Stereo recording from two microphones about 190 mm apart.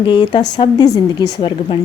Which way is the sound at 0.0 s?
25° left (ahead or behind).